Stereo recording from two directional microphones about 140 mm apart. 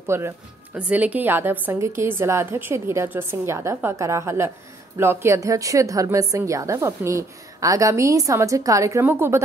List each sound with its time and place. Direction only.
0.0 s a woman's voice: 20° right (ahead or behind)